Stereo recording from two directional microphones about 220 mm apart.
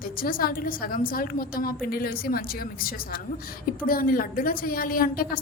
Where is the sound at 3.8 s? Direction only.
40° left (ahead or behind).